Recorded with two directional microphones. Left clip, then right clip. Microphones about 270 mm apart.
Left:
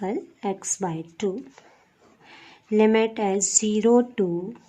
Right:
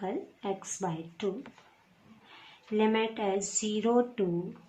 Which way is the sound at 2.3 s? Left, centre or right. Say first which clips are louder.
Left 9 dB; left.